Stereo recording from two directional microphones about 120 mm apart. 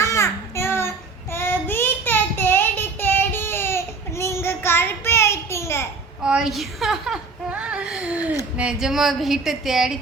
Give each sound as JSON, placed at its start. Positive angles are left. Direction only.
{"t": 0.0, "sound": "child singing", "side_deg": 25}
{"t": 6.2, "sound": "a sound", "side_deg": -5}
{"t": 8.5, "sound": "a woman's voice", "side_deg": -5}